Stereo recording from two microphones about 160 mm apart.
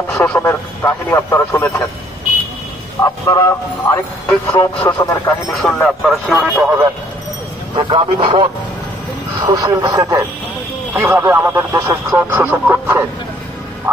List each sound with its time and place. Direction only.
0.1 s a man's voice: 10° left (ahead or behind)
3.0 s speech: 20° left (ahead or behind)
5.5 s speech: centre (ahead or behind)
6.4 s speech: 10° right (ahead or behind)
7.7 s a man's voice: 30° right (ahead or behind)
9.4 s speech: 20° right (ahead or behind)